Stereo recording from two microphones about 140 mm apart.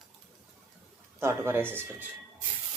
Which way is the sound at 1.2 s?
15° right (ahead or behind).